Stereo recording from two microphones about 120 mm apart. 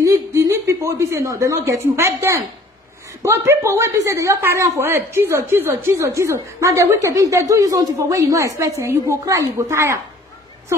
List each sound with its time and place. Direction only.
0.0 s a woman's voice: 25° right (ahead or behind)